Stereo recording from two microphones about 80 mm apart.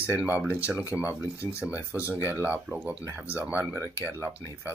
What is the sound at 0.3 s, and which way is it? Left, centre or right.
Speech, centre.